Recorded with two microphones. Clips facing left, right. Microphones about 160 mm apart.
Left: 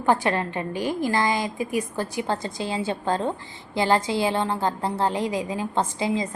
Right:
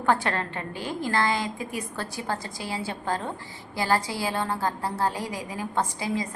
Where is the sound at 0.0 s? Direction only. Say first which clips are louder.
Left 3 dB; 15° left (ahead or behind).